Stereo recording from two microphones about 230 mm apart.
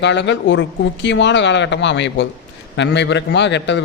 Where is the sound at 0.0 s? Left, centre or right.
Left.